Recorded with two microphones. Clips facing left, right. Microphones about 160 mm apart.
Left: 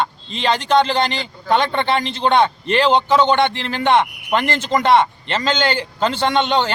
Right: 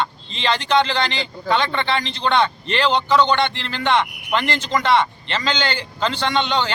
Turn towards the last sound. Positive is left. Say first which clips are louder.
# left 3 dB
turn(degrees=50)  # may be behind; listen again after turning